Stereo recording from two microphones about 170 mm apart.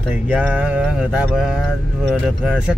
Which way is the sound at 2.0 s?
5° right (ahead or behind).